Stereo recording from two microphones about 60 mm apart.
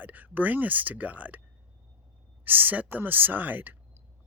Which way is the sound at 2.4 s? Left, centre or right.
Right.